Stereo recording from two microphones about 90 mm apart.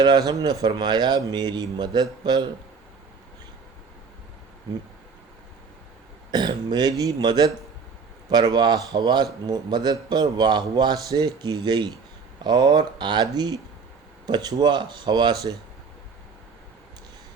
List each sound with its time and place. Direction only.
0.0 s speech: 50° right (ahead or behind)
6.3 s speech: 50° right (ahead or behind)